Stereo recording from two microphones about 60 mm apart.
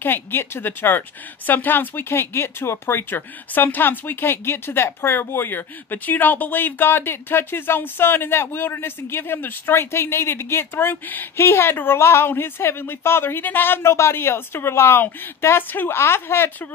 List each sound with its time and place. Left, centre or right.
0.0 s speech: left
13.9 s a woman's voice: left